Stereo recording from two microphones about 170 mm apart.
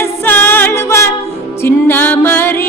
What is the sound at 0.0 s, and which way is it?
Music, 15° left (ahead or behind).